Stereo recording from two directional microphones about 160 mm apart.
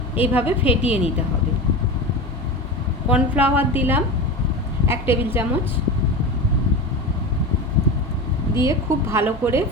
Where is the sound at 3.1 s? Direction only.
10° right (ahead or behind).